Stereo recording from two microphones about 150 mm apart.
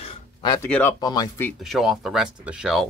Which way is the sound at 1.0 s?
25° left (ahead or behind).